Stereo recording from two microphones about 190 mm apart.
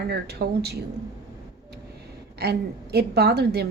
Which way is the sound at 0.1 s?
60° right (ahead or behind).